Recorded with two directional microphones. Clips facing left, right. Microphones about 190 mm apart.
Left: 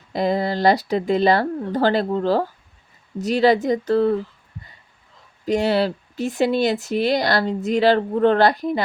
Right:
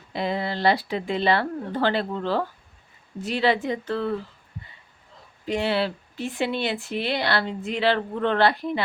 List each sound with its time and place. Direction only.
0.1 s speech: 40° left (ahead or behind)
5.5 s speech: 40° left (ahead or behind)